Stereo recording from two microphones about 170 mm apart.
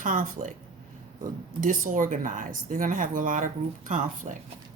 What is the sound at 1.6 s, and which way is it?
A woman's voice, 50° right (ahead or behind).